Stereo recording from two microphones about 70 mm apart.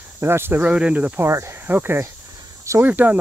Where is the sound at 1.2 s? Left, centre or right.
Right.